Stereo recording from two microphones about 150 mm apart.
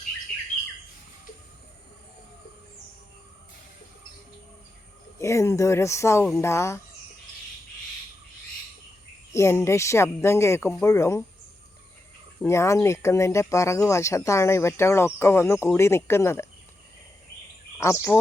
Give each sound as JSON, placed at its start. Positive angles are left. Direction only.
{"t": 5.2, "sound": "speech", "side_deg": 20}
{"t": 9.3, "sound": "speech", "side_deg": 15}
{"t": 12.5, "sound": "speech", "side_deg": 20}
{"t": 17.7, "sound": "speech", "side_deg": 20}